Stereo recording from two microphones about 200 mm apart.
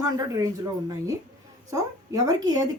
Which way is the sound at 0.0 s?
15° right (ahead or behind).